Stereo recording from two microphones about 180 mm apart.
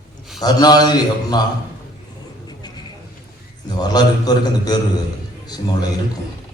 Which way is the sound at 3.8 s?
20° left (ahead or behind).